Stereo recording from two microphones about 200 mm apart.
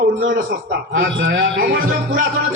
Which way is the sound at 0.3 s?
60° right (ahead or behind).